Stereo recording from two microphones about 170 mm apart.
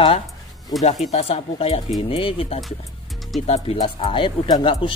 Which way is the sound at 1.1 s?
35° left (ahead or behind).